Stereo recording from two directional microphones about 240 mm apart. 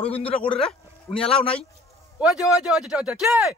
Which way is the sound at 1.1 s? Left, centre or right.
Left.